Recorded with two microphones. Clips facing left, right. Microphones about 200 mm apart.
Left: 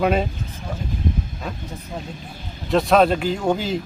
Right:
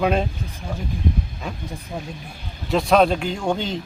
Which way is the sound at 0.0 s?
5° left (ahead or behind).